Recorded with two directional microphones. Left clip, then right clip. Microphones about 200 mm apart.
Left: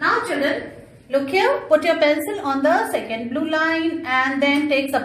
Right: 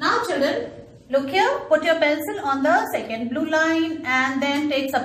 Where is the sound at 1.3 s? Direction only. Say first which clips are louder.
Left 3 dB; 50° left (ahead or behind).